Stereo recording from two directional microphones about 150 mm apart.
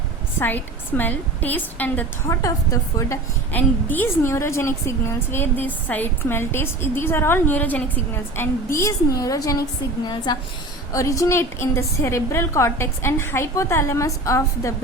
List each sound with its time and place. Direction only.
0.3 s a woman's voice: 15° left (ahead or behind)